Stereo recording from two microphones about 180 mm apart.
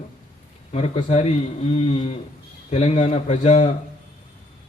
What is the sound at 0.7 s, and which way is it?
A man's voice, 35° left (ahead or behind).